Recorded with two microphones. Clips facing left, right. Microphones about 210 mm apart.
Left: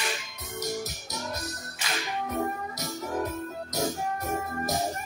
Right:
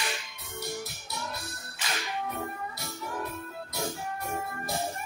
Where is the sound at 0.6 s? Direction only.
40° left (ahead or behind).